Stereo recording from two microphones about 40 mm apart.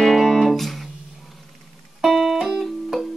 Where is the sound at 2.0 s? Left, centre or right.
Centre.